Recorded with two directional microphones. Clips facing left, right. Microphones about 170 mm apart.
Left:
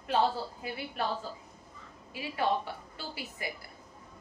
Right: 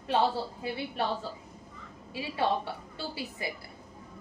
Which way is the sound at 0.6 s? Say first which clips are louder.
Right 3 dB; 25° right (ahead or behind).